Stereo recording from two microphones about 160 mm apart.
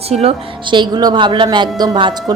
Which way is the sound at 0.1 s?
40° right (ahead or behind).